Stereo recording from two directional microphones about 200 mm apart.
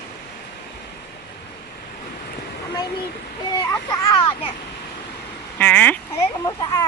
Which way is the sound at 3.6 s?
20° left (ahead or behind).